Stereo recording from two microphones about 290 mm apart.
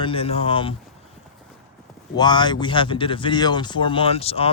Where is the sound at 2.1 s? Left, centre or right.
Centre.